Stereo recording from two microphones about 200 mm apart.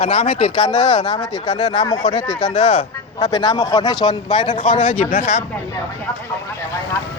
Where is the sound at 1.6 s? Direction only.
30° left (ahead or behind).